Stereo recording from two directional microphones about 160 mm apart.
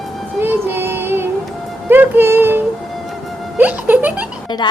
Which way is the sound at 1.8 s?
10° right (ahead or behind).